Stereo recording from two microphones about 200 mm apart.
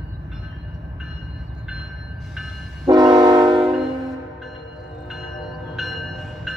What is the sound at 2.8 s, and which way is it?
Train, 20° right (ahead or behind).